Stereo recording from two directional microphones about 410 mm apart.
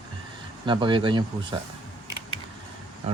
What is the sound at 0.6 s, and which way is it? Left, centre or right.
Speech, centre.